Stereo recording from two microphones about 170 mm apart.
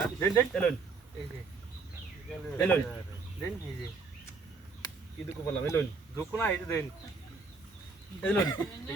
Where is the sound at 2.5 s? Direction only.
10° left (ahead or behind).